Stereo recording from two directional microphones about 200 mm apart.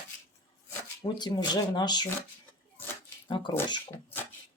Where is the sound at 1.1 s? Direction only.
20° left (ahead or behind).